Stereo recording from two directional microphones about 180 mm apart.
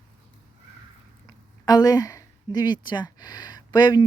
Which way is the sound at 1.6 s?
20° left (ahead or behind).